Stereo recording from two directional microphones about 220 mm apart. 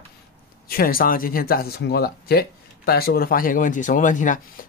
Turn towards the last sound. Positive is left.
turn(degrees=35)  # may be behind; listen again after turning